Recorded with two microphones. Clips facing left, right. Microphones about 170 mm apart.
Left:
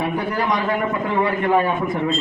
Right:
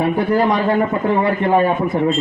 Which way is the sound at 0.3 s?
30° right (ahead or behind).